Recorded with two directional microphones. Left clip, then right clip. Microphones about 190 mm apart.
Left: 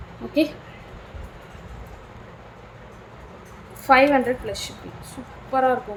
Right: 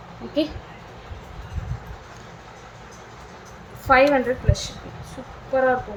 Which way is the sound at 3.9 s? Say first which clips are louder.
Even; 20° left (ahead or behind).